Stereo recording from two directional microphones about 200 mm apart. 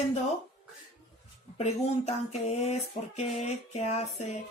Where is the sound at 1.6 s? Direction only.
35° left (ahead or behind).